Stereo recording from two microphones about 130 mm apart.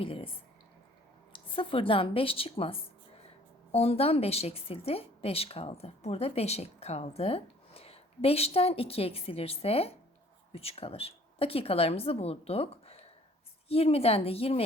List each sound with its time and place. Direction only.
0.0 s speech: 45° left (ahead or behind)
1.3 s a woman's voice: 45° left (ahead or behind)